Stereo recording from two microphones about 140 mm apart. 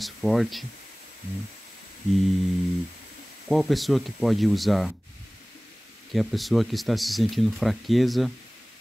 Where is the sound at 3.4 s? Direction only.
Centre (ahead or behind).